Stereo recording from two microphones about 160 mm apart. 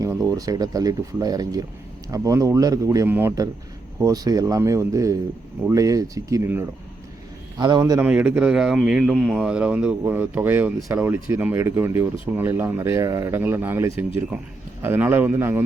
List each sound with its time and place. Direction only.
0.0 s speech: 20° right (ahead or behind)
7.6 s speech: 25° right (ahead or behind)
8.0 s speech: 10° right (ahead or behind)